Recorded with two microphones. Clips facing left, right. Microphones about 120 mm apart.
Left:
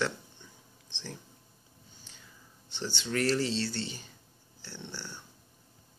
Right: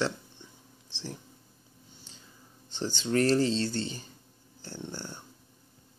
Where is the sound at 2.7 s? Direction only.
40° right (ahead or behind).